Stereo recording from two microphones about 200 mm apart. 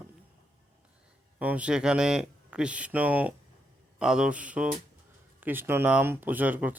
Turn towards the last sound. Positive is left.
turn(degrees=-10)  # may be behind; listen again after turning